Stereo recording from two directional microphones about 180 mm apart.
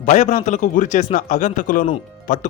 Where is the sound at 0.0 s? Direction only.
45° left (ahead or behind).